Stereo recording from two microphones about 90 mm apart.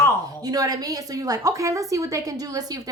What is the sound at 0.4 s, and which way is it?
A woman's voice, 45° right (ahead or behind).